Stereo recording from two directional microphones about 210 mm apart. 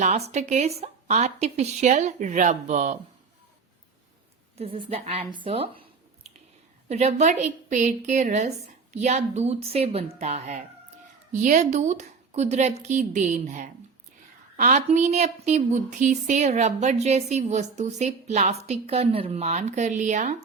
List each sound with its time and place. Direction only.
0.0 s a woman's voice: 35° right (ahead or behind)
4.5 s a woman's voice: 30° right (ahead or behind)